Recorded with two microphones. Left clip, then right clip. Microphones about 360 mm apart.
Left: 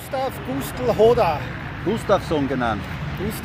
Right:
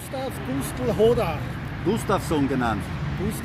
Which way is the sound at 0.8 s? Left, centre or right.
Left.